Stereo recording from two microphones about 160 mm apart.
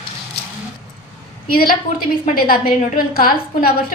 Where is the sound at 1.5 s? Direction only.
65° left (ahead or behind).